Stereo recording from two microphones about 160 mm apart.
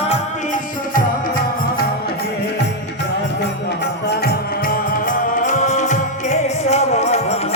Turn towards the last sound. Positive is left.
turn(degrees=40)  # may be behind; listen again after turning